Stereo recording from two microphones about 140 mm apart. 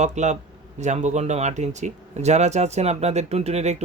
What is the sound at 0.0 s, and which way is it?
Speech, 55° right (ahead or behind).